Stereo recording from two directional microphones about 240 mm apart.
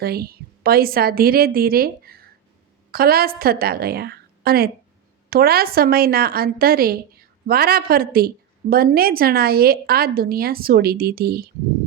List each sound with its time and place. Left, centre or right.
0.0 s a woman's voice: right